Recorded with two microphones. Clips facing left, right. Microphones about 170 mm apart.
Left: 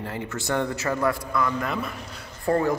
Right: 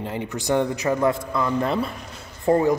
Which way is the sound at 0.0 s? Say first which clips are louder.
Right 3 dB; 20° right (ahead or behind).